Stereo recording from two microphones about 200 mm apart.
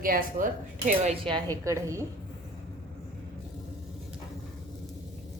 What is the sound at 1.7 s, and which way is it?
Speech, 15° right (ahead or behind).